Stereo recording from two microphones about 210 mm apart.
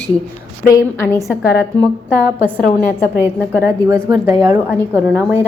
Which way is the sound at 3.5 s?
10° right (ahead or behind).